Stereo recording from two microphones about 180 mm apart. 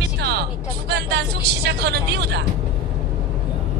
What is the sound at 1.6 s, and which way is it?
Speech, 65° right (ahead or behind).